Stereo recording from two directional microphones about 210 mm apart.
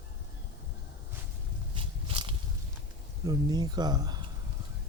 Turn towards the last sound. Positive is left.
turn(degrees=-20)  # may be behind; listen again after turning